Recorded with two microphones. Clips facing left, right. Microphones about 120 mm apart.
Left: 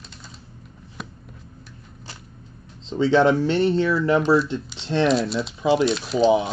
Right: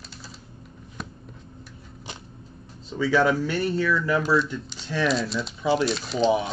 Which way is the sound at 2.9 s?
25° left (ahead or behind).